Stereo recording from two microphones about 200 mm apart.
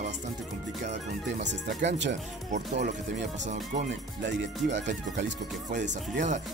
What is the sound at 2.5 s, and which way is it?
Speech, 35° right (ahead or behind).